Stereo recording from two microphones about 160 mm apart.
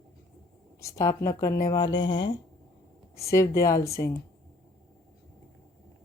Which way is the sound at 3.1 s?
20° left (ahead or behind).